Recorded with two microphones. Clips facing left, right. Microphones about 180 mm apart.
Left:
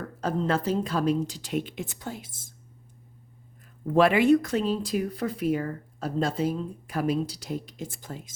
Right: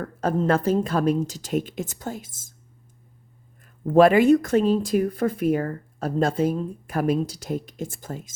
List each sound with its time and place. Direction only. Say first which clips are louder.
0.2 s speech: right 5 dB; 50° right (ahead or behind)
3.8 s speech: right 5 dB; 45° right (ahead or behind)